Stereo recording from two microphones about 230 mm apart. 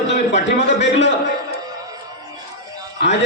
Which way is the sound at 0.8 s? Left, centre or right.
Left.